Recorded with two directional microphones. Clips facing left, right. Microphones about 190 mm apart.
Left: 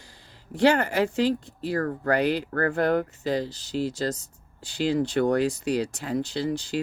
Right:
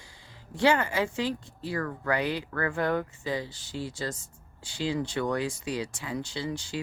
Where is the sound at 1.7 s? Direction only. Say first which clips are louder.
Left 5 dB; 45° left (ahead or behind).